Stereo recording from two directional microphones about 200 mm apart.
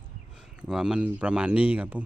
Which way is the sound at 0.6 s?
5° right (ahead or behind).